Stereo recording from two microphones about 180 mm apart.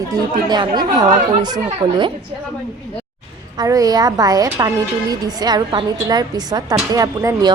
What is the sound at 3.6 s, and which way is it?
A child's voice, 20° right (ahead or behind).